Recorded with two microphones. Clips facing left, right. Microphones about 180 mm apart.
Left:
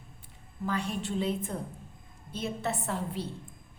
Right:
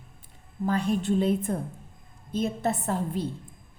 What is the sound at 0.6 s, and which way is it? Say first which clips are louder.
A woman's voice: right 7 dB; 40° right (ahead or behind).